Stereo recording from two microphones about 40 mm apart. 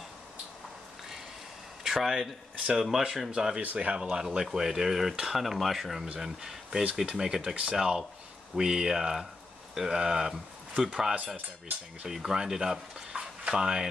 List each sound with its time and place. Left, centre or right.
1.8 s a sound: centre
2.6 s speech: centre
3.3 s speech: right
3.6 s speech: right
3.9 s speech: centre
13.1 s a sound: right
13.5 s speech: centre